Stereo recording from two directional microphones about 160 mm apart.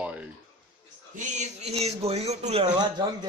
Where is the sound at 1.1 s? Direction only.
45° right (ahead or behind).